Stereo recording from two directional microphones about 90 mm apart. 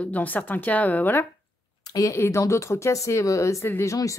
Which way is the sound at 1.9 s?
35° left (ahead or behind).